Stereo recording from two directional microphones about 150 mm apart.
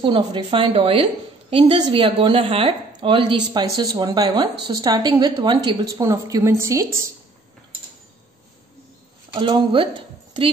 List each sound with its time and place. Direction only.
0.0 s a woman's voice: 35° right (ahead or behind)
9.3 s speech: 35° right (ahead or behind)